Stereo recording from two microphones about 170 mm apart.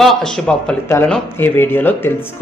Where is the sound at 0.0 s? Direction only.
Centre (ahead or behind).